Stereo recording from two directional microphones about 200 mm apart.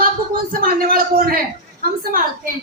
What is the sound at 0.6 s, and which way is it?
Speech, 45° right (ahead or behind).